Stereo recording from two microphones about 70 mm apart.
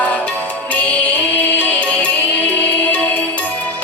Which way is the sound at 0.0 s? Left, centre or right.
Left.